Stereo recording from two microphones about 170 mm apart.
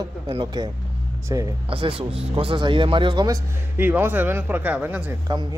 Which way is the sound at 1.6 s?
30° right (ahead or behind).